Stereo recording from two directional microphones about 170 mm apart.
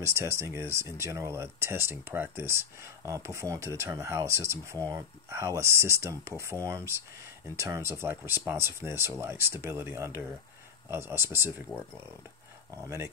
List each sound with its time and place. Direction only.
0.0 s speech: 15° right (ahead or behind)
12.7 s speech: 15° right (ahead or behind)